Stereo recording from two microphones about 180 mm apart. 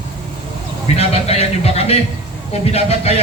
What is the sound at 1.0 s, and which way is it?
A man's voice, 35° left (ahead or behind).